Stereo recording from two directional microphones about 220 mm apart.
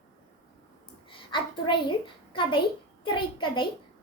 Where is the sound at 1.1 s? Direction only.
20° left (ahead or behind).